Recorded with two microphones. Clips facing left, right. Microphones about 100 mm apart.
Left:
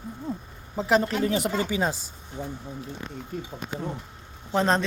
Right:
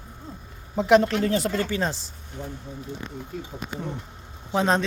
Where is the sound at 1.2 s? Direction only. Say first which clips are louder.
Right 1 dB; 15° left (ahead or behind).